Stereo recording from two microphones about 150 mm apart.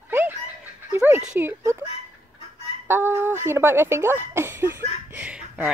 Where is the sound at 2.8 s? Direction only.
15° right (ahead or behind).